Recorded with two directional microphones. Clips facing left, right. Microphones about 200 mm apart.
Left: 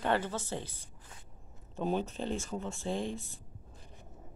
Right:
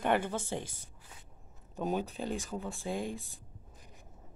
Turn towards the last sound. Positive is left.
turn(degrees=-10)  # may be behind; listen again after turning